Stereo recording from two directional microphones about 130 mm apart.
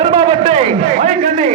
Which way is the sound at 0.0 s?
45° right (ahead or behind).